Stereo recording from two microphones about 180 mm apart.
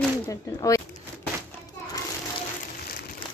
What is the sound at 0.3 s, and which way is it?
Speech, 20° left (ahead or behind).